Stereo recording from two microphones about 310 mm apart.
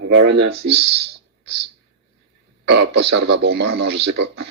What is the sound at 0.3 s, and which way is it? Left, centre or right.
Speech, right.